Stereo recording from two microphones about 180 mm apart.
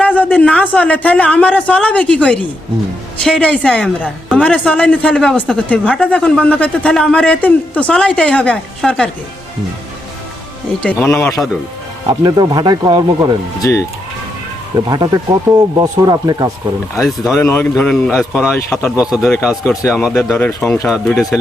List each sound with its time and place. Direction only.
0.0 s speech: 10° left (ahead or behind)
10.8 s speech: 5° left (ahead or behind)
12.0 s speech: 20° right (ahead or behind)
13.6 s speech: 15° left (ahead or behind)
14.8 s speech: 20° right (ahead or behind)
17.3 s speech: 15° left (ahead or behind)
18.9 s speech: 5° right (ahead or behind)
20.3 s speech: 10° left (ahead or behind)